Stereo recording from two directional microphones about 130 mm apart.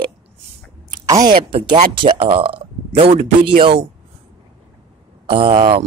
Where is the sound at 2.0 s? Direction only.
40° right (ahead or behind).